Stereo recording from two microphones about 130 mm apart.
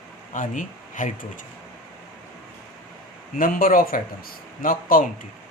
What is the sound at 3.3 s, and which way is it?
Speech, 90° left.